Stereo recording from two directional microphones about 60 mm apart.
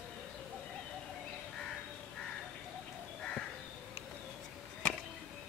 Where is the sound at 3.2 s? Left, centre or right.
Centre.